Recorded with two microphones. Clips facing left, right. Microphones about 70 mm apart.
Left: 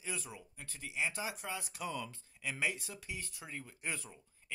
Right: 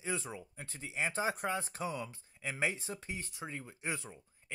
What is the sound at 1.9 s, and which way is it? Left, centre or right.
Speech, right.